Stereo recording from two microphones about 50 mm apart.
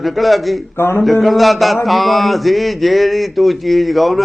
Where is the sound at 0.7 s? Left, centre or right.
Left.